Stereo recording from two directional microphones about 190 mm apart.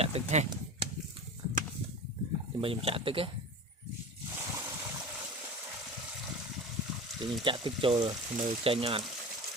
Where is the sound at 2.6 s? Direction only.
30° right (ahead or behind).